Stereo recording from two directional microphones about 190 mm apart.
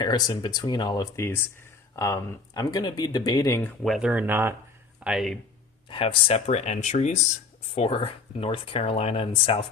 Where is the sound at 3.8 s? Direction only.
Centre (ahead or behind).